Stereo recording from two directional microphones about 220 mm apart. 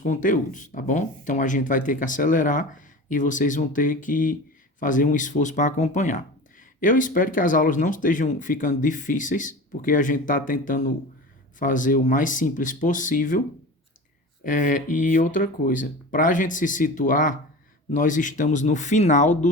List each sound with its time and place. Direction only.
0.0 s speech: 35° left (ahead or behind)
14.4 s speech: 35° left (ahead or behind)